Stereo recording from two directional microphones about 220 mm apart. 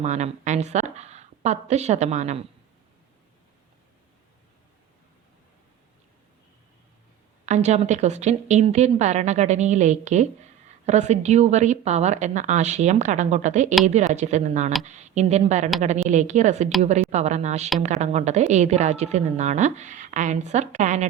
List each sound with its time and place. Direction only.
0.0 s a woman's voice: 30° right (ahead or behind)
7.4 s a woman's voice: 30° right (ahead or behind)